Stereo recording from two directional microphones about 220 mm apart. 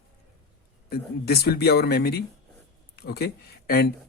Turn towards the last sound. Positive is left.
turn(degrees=45)  # may be behind; listen again after turning